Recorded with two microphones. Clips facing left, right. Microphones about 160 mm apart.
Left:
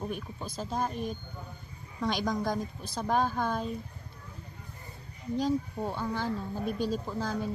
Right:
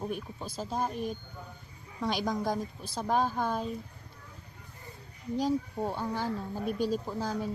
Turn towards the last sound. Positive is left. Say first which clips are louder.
# even
turn(degrees=-10)  # may be behind; listen again after turning